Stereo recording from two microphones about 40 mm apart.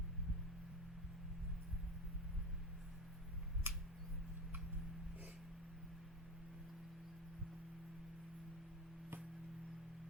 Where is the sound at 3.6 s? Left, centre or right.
Right.